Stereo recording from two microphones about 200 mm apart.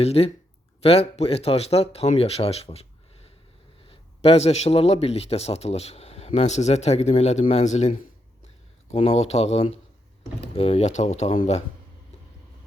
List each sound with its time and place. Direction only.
0.0 s speech: 30° left (ahead or behind)
3.8 s speech: 30° left (ahead or behind)